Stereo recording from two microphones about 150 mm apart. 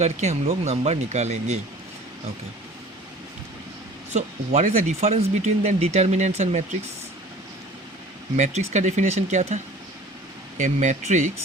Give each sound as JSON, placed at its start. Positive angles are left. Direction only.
{"t": 0.0, "sound": "speech", "side_deg": -50}
{"t": 4.1, "sound": "speech", "side_deg": -50}
{"t": 8.4, "sound": "speech", "side_deg": -50}
{"t": 10.6, "sound": "speech", "side_deg": -50}